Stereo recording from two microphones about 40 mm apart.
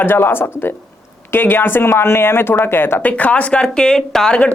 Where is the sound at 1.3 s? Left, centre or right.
Left.